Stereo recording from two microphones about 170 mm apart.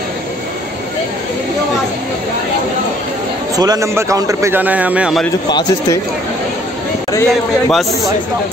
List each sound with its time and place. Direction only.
3.5 s a man's voice: 20° right (ahead or behind)
5.5 s speech: 25° left (ahead or behind)
7.1 s speech: 15° left (ahead or behind)